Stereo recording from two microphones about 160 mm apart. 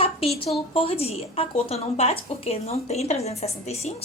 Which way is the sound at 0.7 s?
35° left (ahead or behind).